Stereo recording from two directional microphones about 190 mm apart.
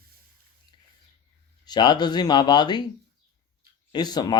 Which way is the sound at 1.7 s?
20° left (ahead or behind).